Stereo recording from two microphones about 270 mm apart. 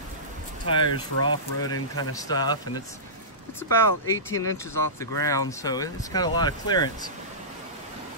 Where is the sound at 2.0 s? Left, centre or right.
Centre.